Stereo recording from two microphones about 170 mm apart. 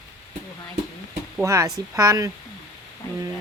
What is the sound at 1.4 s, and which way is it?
Speech, 15° right (ahead or behind).